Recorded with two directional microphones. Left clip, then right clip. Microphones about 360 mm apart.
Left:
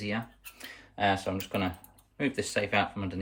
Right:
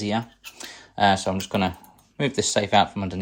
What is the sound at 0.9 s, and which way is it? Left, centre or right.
Speech, right.